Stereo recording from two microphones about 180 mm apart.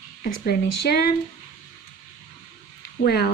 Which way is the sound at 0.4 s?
55° left (ahead or behind).